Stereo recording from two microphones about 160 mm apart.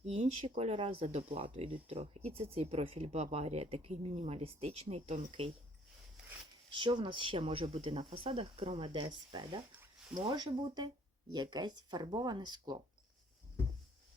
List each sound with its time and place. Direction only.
0.0 s speech: 45° right (ahead or behind)
6.7 s speech: 30° right (ahead or behind)